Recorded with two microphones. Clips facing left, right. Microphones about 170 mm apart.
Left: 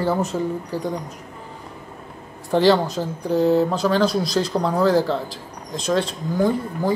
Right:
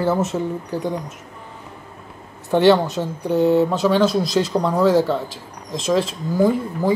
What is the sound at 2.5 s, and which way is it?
Speech, centre (ahead or behind).